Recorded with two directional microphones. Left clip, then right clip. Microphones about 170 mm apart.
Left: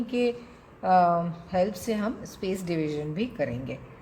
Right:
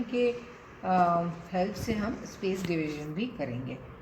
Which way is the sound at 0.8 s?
70° left (ahead or behind).